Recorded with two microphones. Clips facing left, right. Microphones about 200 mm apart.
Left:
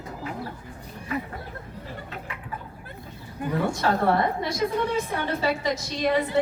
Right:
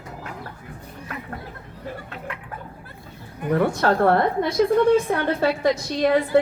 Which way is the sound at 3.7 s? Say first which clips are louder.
Right 3 dB; 55° right (ahead or behind).